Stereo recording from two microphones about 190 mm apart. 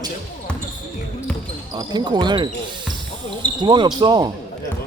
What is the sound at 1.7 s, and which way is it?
Speech, 25° right (ahead or behind).